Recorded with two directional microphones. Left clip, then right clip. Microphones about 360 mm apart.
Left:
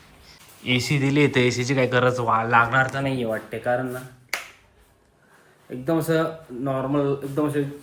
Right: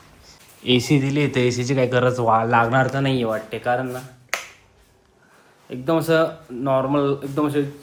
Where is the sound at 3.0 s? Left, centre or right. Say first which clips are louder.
Right 4 dB; right.